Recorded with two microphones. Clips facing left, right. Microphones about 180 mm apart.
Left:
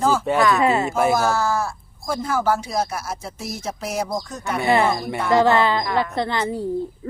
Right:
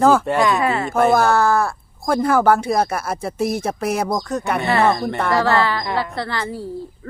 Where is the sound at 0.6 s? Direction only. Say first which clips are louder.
Left 2 dB; 25° left (ahead or behind).